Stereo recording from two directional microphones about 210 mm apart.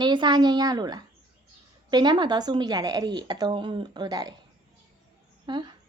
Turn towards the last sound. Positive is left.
turn(degrees=-20)  # may be behind; listen again after turning